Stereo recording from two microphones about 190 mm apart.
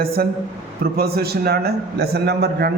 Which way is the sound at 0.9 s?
55° right (ahead or behind).